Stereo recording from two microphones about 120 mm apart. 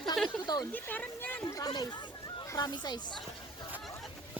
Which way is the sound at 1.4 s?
35° left (ahead or behind).